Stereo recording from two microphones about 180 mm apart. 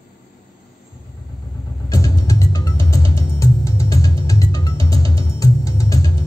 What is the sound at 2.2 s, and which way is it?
Music, 15° left (ahead or behind).